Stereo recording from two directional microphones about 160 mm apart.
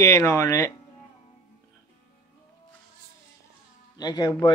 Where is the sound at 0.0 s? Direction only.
15° left (ahead or behind).